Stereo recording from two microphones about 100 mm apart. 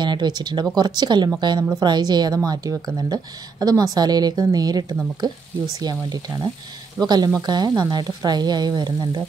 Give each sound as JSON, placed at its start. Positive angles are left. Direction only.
{"t": 0.0, "sound": "a woman's voice", "side_deg": -45}